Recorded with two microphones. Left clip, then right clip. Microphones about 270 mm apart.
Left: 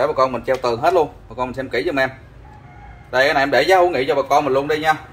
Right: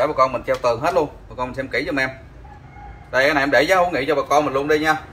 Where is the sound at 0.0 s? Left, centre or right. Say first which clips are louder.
Even; left.